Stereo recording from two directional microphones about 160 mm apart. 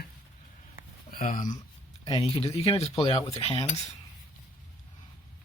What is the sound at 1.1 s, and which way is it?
Speech, 55° left (ahead or behind).